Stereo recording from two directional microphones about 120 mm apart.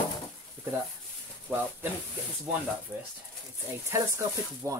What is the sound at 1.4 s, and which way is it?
Speech, 15° right (ahead or behind).